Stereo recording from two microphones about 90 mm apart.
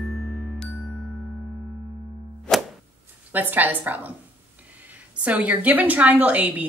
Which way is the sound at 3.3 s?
20° right (ahead or behind).